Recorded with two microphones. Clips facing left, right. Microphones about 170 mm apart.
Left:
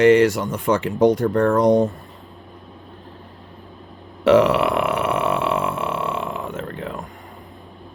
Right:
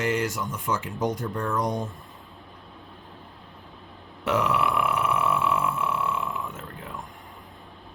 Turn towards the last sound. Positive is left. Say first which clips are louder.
# left 9 dB
turn(degrees=85)